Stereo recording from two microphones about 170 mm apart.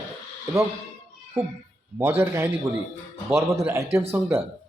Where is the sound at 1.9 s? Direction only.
15° right (ahead or behind).